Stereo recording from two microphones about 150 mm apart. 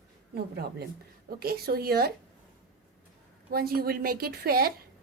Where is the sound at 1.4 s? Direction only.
90° right.